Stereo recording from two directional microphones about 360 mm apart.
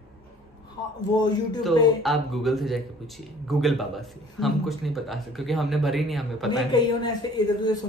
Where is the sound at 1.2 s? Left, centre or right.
Centre.